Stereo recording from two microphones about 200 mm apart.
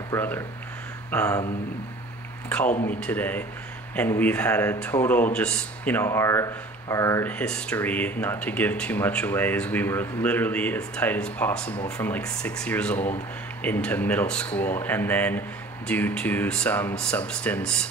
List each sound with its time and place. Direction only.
0.1 s speech: 15° left (ahead or behind)
2.7 s speech: 45° left (ahead or behind)
3.0 s speech: 10° left (ahead or behind)